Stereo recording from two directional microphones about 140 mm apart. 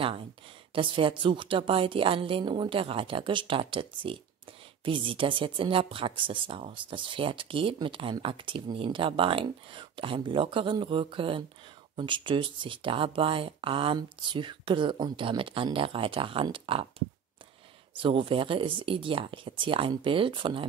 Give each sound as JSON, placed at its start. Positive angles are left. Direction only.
{"t": 0.7, "sound": "speech", "side_deg": -40}
{"t": 17.9, "sound": "speech", "side_deg": -35}